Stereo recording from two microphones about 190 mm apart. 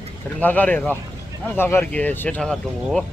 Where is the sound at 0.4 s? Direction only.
10° left (ahead or behind).